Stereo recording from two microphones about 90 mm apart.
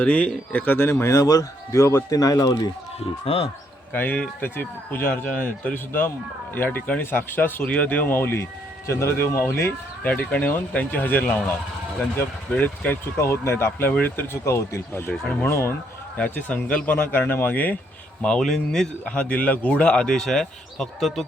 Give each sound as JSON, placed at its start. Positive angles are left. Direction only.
{"t": 0.0, "sound": "speech", "side_deg": 15}
{"t": 3.2, "sound": "speech", "side_deg": 90}
{"t": 3.9, "sound": "speech", "side_deg": 15}
{"t": 13.9, "sound": "speech", "side_deg": 15}
{"t": 14.4, "sound": "speech", "side_deg": 30}
{"t": 15.1, "sound": "speech", "side_deg": 10}
{"t": 15.4, "sound": "speech", "side_deg": 30}
{"t": 16.1, "sound": "speech", "side_deg": 15}
{"t": 18.2, "sound": "speech", "side_deg": 10}